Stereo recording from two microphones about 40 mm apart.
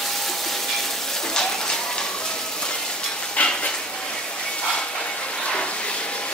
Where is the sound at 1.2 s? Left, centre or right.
Centre.